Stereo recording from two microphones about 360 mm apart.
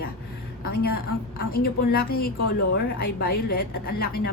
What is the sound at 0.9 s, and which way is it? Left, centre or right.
A woman's voice, left.